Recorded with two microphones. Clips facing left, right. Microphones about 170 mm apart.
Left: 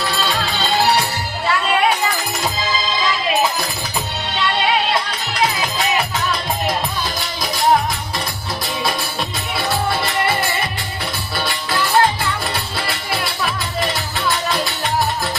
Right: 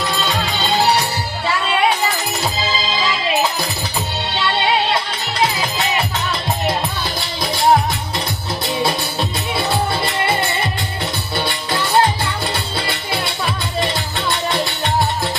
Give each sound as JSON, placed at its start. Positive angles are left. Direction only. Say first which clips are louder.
{"t": 9.6, "sound": "music", "louder": "even", "side_deg": -25}
{"t": 11.3, "sound": "music", "louder": "even", "side_deg": -25}